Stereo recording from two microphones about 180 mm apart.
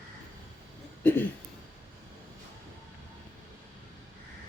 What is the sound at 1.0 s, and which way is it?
Speech, 10° left (ahead or behind).